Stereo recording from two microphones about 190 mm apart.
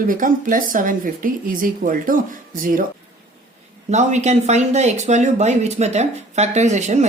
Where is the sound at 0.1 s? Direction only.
45° right (ahead or behind).